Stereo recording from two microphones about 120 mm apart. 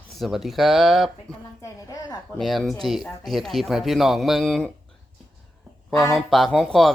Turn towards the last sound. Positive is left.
turn(degrees=0)  # may be behind; listen again after turning